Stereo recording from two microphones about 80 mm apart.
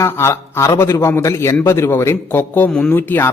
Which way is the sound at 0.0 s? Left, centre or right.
Left.